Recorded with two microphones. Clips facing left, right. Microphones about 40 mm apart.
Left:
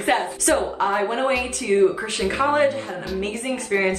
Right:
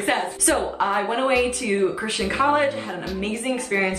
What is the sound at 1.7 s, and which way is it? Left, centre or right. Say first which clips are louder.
Speech: left 6 dB; right.